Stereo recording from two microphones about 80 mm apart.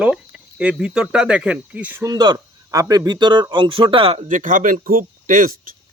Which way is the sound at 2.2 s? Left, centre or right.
Right.